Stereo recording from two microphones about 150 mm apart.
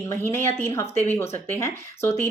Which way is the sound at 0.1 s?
15° left (ahead or behind).